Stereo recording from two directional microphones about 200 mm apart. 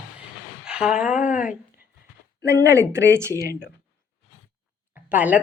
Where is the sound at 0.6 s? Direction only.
5° right (ahead or behind).